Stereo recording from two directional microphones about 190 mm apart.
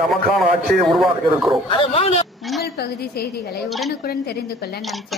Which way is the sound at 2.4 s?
Centre (ahead or behind).